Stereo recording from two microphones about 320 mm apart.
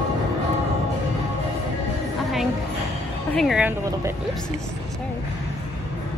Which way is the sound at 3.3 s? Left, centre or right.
Centre.